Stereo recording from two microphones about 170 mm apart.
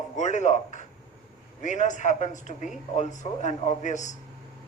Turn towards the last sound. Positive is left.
turn(degrees=45)  # may be behind; listen again after turning